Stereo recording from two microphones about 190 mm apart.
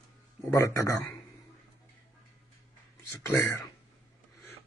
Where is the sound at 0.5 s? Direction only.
15° left (ahead or behind).